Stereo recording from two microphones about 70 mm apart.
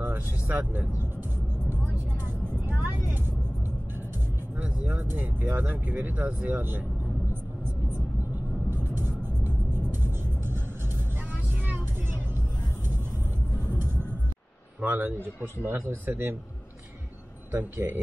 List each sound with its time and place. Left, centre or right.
0.0 s vehicle: right
4.6 s speech: right
8.6 s music: right
14.8 s speech: right
15.7 s speech: right
17.5 s speech: right